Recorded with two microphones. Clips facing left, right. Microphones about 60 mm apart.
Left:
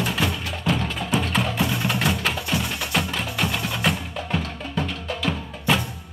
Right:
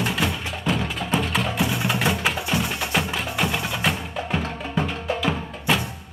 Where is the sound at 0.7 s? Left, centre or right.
Centre.